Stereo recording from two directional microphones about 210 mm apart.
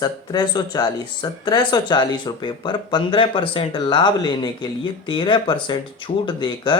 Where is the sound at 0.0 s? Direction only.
20° left (ahead or behind).